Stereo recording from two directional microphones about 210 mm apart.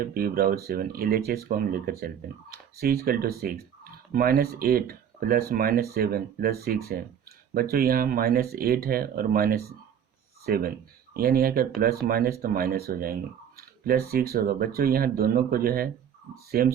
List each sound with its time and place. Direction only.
0.0 s speech: 45° right (ahead or behind)
13.6 s clicking: 45° right (ahead or behind)
14.1 s speech: 45° right (ahead or behind)